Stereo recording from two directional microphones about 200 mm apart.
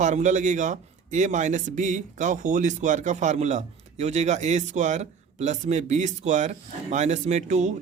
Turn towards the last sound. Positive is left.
turn(degrees=-35)  # may be behind; listen again after turning